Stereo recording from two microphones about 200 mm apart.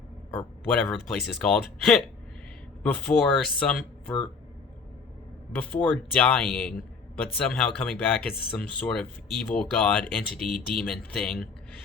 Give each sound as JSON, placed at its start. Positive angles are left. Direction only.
{"t": 0.3, "sound": "speech", "side_deg": 5}
{"t": 5.5, "sound": "speech", "side_deg": 5}